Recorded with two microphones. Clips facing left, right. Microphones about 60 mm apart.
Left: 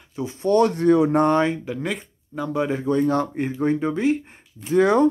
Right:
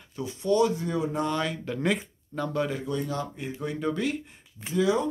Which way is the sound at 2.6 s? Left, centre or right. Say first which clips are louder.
Left 13 dB; left.